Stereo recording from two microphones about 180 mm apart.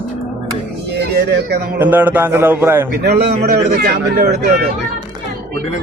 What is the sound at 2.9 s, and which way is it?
Speech, 65° right (ahead or behind).